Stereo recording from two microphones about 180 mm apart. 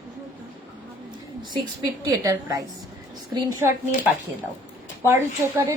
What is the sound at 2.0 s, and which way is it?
A woman's voice, 20° right (ahead or behind).